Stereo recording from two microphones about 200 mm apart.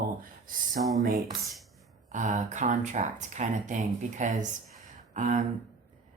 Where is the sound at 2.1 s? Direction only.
35° right (ahead or behind).